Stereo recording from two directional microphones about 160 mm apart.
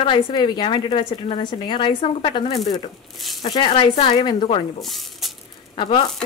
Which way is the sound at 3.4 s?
30° left (ahead or behind).